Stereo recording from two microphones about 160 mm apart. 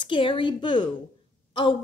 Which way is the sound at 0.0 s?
30° left (ahead or behind).